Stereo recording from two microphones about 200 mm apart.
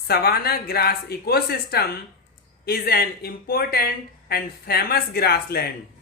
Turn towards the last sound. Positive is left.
turn(degrees=50)  # may be behind; listen again after turning